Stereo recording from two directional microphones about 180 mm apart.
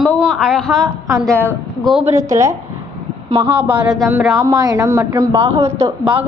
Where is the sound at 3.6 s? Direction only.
5° right (ahead or behind).